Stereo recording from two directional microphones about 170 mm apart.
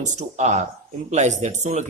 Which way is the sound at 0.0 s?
45° right (ahead or behind).